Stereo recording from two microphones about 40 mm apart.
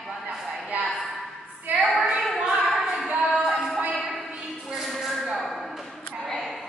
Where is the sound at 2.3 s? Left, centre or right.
Centre.